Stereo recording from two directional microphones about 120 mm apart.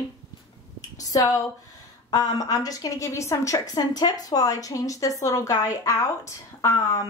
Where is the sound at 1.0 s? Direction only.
30° left (ahead or behind).